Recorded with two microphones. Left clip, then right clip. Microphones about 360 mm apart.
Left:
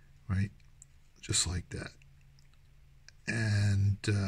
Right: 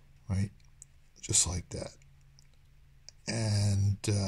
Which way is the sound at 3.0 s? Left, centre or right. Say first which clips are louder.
Left 1 dB; left.